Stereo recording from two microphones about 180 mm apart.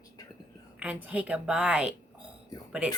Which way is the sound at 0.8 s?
10° right (ahead or behind).